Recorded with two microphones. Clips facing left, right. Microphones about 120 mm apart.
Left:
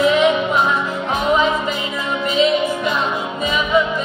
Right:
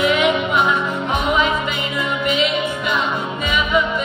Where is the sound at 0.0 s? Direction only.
35° left (ahead or behind).